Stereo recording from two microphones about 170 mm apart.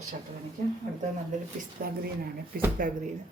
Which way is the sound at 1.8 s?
55° right (ahead or behind).